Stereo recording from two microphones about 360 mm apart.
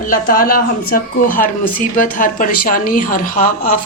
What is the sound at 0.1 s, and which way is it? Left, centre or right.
Speech, left.